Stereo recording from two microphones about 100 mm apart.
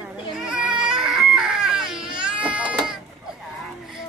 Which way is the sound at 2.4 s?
10° right (ahead or behind).